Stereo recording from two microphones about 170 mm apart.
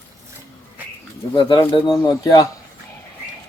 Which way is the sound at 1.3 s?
25° left (ahead or behind).